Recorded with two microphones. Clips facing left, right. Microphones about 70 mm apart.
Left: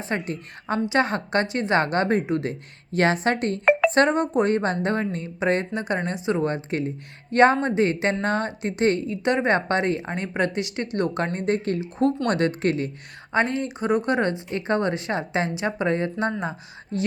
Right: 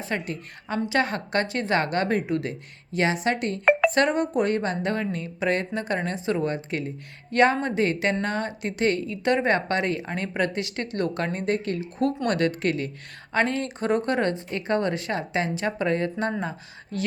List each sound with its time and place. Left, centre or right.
0.0 s speech: left
2.9 s speech: left
6.4 s speech: left
13.3 s speech: centre